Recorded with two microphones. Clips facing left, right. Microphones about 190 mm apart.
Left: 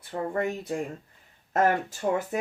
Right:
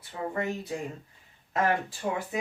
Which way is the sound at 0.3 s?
50° left (ahead or behind).